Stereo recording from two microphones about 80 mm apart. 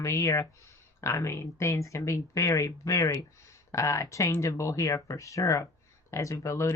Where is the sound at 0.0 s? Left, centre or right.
Left.